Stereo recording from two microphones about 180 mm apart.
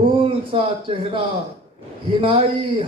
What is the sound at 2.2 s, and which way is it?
Speech, 30° right (ahead or behind).